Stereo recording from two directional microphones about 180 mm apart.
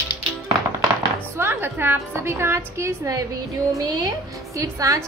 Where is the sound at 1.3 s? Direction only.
10° right (ahead or behind).